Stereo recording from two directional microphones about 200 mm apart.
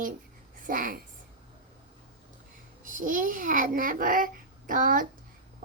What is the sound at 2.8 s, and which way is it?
A child's voice, 40° right (ahead or behind).